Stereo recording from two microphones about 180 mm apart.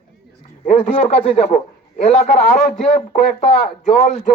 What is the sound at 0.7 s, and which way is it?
Speech, 35° left (ahead or behind).